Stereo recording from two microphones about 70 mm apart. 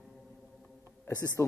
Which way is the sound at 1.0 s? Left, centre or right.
Left.